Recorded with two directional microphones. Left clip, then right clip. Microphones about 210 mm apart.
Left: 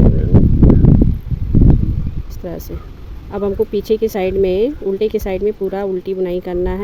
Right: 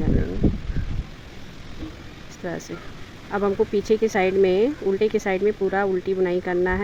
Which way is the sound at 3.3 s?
35° left (ahead or behind).